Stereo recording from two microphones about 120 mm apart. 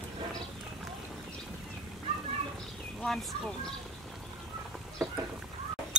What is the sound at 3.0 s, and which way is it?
Speech, 5° left (ahead or behind).